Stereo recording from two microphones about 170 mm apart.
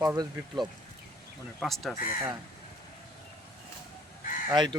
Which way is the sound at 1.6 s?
Centre (ahead or behind).